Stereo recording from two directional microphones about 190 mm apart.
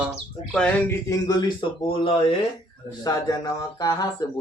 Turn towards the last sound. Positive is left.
turn(degrees=20)  # may be behind; listen again after turning